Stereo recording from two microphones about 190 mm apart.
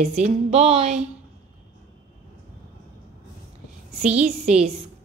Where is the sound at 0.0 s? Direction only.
35° right (ahead or behind).